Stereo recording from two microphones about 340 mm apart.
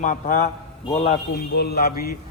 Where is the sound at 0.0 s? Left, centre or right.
Left.